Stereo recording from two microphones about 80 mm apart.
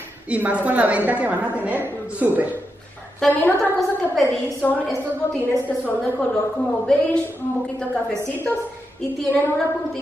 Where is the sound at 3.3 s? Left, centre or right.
Left.